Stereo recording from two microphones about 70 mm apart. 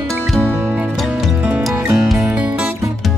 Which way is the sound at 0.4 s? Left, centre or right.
Right.